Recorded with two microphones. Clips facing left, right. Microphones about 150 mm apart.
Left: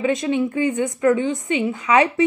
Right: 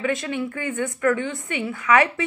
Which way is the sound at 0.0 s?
20° left (ahead or behind).